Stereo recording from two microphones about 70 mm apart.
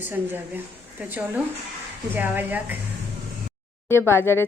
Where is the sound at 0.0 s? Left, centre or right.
Right.